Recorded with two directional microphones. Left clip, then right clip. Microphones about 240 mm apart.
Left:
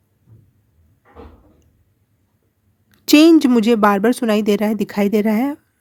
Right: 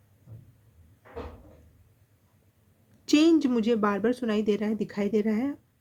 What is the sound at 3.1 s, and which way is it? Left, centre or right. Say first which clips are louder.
Speech: left 11 dB; left.